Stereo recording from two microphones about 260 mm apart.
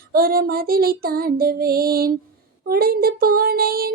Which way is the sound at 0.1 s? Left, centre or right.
Right.